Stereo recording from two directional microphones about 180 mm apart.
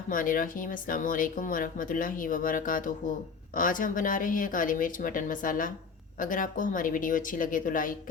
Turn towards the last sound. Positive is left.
turn(degrees=50)  # may be behind; listen again after turning